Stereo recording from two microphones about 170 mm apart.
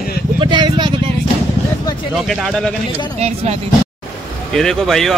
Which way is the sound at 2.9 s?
40° right (ahead or behind).